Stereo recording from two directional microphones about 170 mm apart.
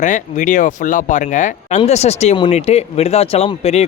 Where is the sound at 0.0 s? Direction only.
45° left (ahead or behind).